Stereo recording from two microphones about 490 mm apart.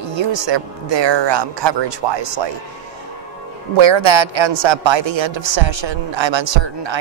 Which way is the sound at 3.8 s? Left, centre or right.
Right.